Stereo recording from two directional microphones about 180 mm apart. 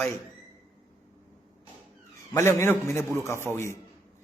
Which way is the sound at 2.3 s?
15° left (ahead or behind).